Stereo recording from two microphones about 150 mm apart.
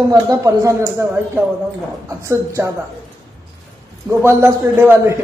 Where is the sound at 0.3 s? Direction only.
20° right (ahead or behind).